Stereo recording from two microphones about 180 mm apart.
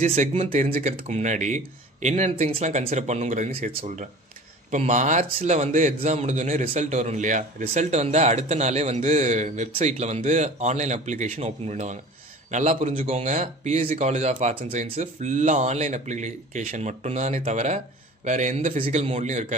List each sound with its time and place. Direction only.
0.0 s a man's voice: 40° right (ahead or behind)